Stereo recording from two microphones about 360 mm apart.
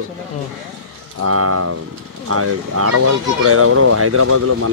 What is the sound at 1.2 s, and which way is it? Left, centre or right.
Speech, right.